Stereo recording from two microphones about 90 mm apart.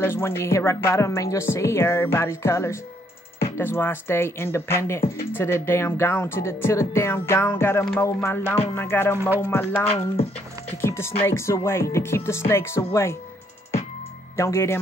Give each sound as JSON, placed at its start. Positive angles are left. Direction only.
{"t": 0.0, "sound": "speech", "side_deg": 25}
{"t": 14.3, "sound": "speech", "side_deg": 30}